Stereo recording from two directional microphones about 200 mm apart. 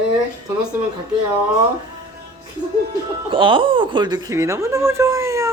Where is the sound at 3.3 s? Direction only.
25° right (ahead or behind).